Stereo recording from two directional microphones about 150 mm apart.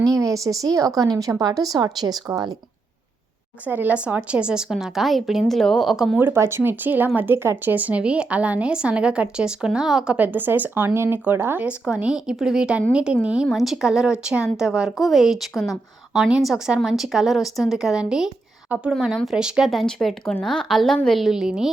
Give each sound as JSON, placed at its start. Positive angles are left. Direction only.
{"t": 0.0, "sound": "a woman's voice", "side_deg": -20}
{"t": 3.7, "sound": "a woman's voice", "side_deg": -10}
{"t": 6.1, "sound": "a woman's voice", "side_deg": -15}